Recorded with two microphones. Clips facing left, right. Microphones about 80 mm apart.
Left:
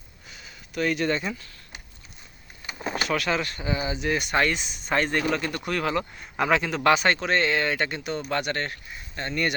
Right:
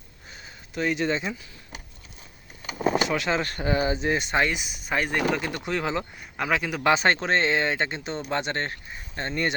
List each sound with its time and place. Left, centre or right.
0.3 s speech: right; by 1.5 s centre
3.1 s speech: right
3.4 s speech: right
4.1 s speech: right
4.6 s speech: centre
6.3 s a man's voice: centre
6.9 s speech: right